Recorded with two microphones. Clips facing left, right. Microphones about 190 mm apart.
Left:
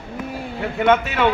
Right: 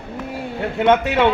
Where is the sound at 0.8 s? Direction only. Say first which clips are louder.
Right 2 dB; 20° right (ahead or behind).